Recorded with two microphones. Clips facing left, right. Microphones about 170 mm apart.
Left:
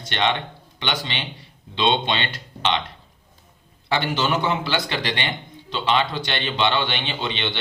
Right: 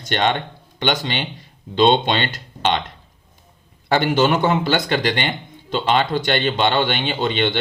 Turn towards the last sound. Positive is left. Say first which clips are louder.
# right 7 dB
turn(degrees=-50)  # may be behind; listen again after turning